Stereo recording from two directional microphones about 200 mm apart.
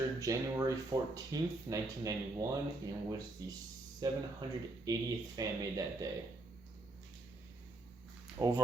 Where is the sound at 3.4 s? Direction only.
20° right (ahead or behind).